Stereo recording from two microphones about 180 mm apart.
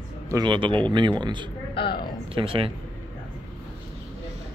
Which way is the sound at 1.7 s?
25° left (ahead or behind).